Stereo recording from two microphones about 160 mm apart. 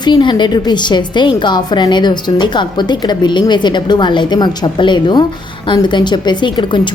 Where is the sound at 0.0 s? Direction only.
30° left (ahead or behind).